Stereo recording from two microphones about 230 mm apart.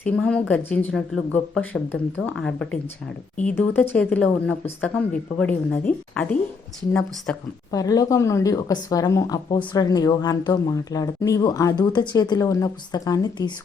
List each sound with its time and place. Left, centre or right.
0.0 s speech: centre